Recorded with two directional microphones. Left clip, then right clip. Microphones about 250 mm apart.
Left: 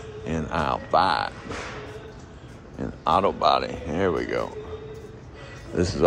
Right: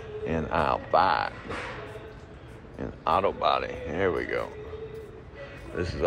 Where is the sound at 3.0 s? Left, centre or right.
Centre.